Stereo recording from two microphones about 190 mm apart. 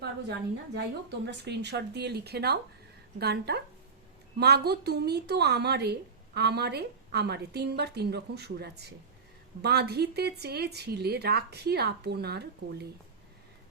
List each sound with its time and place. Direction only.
0.0 s a woman's voice: 60° right (ahead or behind)